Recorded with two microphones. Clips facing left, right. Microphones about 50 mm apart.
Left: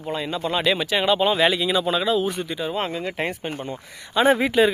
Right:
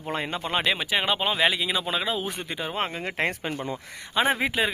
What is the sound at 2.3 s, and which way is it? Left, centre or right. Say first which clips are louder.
Speech: left 4 dB; right.